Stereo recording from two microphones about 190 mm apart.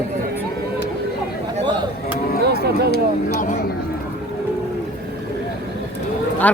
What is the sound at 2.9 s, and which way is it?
Speech, 60° left (ahead or behind).